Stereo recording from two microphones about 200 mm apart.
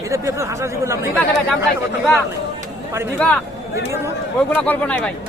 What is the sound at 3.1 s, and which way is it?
Speech, 5° left (ahead or behind).